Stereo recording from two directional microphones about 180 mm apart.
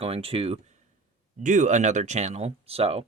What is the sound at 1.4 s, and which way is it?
Speech, 45° right (ahead or behind).